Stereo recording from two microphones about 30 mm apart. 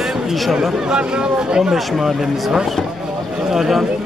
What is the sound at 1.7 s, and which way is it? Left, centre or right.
Speech, centre.